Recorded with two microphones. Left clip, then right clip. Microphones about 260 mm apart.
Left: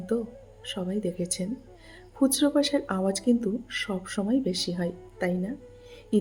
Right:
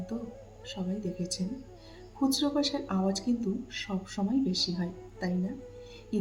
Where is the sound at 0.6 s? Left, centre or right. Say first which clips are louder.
Left 6 dB; left.